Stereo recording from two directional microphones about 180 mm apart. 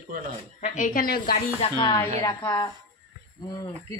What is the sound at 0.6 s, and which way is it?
Speech, 45° left (ahead or behind).